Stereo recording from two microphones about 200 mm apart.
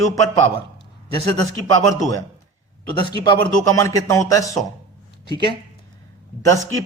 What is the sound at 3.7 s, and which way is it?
Speech, 15° left (ahead or behind).